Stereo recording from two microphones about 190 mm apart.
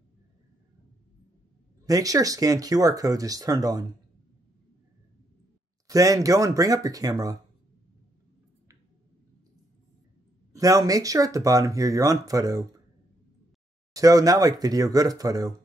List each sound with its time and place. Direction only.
1.9 s speech: 20° right (ahead or behind)
5.9 s speech: 15° right (ahead or behind)
10.5 s speech: 20° right (ahead or behind)
13.9 s speech: 20° right (ahead or behind)